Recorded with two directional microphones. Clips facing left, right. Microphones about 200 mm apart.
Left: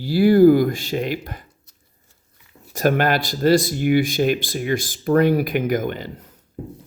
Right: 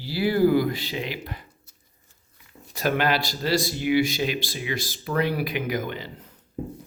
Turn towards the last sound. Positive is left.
turn(degrees=50)  # may be behind; listen again after turning